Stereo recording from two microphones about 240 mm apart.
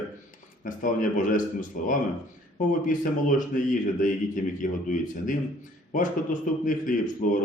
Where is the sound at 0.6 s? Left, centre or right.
Left.